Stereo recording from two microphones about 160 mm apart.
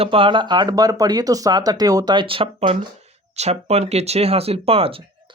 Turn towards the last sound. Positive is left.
turn(degrees=-35)  # may be behind; listen again after turning